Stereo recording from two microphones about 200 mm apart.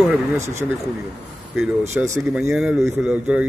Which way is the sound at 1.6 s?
10° right (ahead or behind).